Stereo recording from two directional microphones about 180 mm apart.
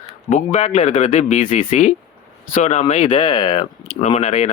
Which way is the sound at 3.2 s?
25° left (ahead or behind).